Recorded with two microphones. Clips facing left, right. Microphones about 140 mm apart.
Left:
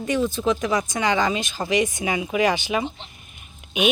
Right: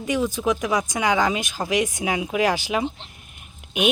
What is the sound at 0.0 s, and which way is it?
Speech, 10° right (ahead or behind).